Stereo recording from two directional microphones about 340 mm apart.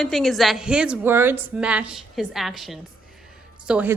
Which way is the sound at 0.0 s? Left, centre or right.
Centre.